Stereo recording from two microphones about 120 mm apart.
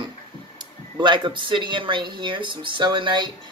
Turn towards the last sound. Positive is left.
turn(degrees=-40)  # may be behind; listen again after turning